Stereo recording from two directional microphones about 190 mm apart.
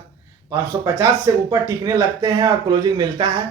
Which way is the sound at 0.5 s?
15° right (ahead or behind).